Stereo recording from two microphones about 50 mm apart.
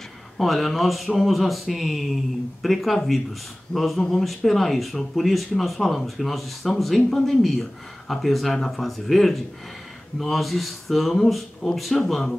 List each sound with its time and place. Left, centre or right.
0.4 s speech: centre